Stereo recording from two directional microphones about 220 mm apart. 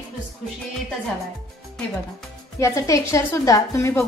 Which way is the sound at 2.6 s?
15° left (ahead or behind).